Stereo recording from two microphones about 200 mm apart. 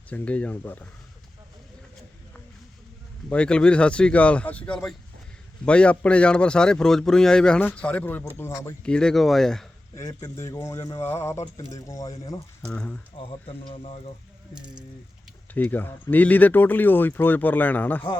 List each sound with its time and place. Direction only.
0.1 s speech: 5° left (ahead or behind)
3.2 s speech: 5° left (ahead or behind)
9.9 s speech: 15° left (ahead or behind)
12.6 s speech: 5° left (ahead or behind)
13.1 s speech: 30° left (ahead or behind)
15.5 s speech: 10° left (ahead or behind)